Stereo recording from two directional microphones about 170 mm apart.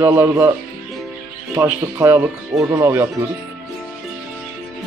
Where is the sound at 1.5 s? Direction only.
15° right (ahead or behind).